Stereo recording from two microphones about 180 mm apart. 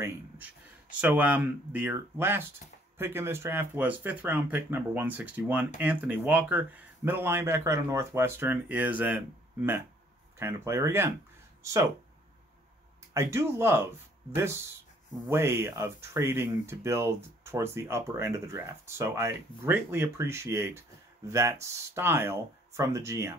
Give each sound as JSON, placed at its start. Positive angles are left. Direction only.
{"t": 1.0, "sound": "speech", "side_deg": -10}
{"t": 13.1, "sound": "speech", "side_deg": -15}